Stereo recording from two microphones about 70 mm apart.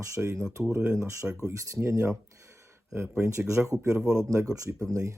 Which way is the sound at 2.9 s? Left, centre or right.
Right.